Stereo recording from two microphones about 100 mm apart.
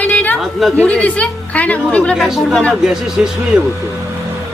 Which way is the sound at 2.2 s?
5° right (ahead or behind).